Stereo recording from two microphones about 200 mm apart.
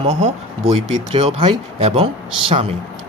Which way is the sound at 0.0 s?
35° right (ahead or behind).